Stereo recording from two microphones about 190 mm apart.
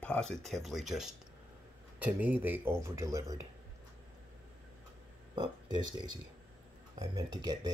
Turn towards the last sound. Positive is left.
turn(degrees=-20)  # may be behind; listen again after turning